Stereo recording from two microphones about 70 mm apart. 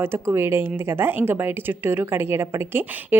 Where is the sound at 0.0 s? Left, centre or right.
Right.